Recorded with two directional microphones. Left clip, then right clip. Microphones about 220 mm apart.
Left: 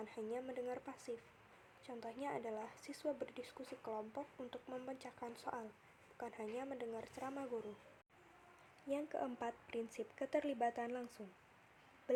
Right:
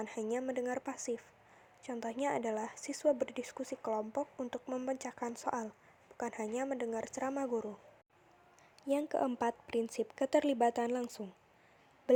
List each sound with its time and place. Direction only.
0.0 s a woman's voice: 35° right (ahead or behind)
8.9 s a woman's voice: 35° right (ahead or behind)
12.1 s a sound: 35° right (ahead or behind)